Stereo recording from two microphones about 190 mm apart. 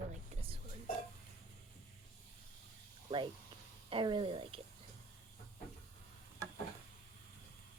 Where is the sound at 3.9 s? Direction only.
25° right (ahead or behind).